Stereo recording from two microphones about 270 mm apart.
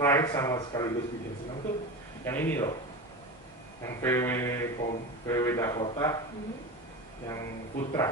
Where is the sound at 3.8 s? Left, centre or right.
Centre.